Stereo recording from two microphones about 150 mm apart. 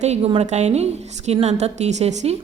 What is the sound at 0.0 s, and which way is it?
A woman's voice, 45° right (ahead or behind).